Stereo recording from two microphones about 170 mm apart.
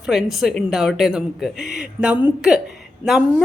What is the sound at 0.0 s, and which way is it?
Speech, 5° right (ahead or behind).